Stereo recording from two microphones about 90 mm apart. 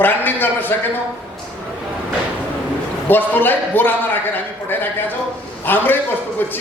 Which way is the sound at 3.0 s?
20° left (ahead or behind).